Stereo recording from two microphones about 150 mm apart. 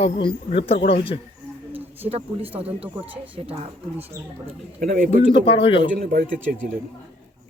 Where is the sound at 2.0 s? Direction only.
40° right (ahead or behind).